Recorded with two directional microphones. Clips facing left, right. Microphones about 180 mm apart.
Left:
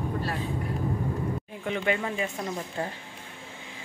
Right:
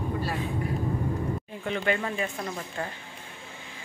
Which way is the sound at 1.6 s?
10° left (ahead or behind).